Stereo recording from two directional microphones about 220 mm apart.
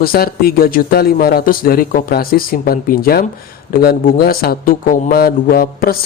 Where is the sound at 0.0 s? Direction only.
45° left (ahead or behind).